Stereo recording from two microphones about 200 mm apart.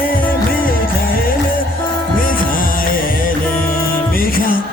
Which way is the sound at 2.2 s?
45° left (ahead or behind).